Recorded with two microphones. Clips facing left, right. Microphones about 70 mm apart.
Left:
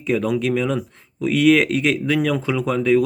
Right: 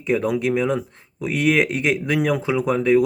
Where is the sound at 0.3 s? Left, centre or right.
Centre.